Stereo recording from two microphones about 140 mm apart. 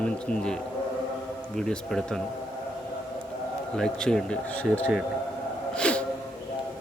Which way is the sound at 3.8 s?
5° left (ahead or behind).